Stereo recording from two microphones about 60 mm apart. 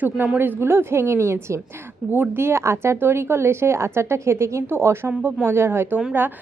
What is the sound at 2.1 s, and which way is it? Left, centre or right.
A woman's voice, right.